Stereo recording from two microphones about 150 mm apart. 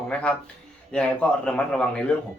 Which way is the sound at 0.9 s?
5° left (ahead or behind).